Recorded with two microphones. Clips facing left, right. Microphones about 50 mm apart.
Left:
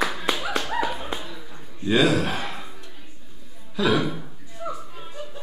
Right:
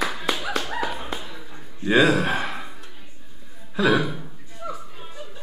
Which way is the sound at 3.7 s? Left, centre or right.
Right.